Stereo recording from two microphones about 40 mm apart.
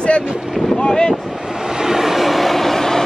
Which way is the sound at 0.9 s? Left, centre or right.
Centre.